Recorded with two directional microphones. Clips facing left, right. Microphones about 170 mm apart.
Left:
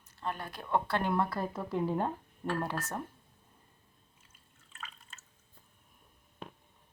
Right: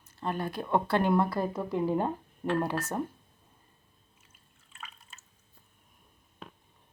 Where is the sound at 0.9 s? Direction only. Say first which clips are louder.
Right 5 dB; 5° right (ahead or behind).